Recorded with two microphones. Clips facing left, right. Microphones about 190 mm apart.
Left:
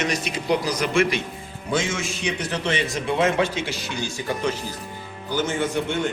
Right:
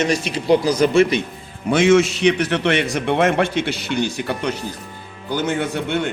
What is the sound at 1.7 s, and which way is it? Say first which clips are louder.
A man's voice: right 11 dB; 70° right (ahead or behind).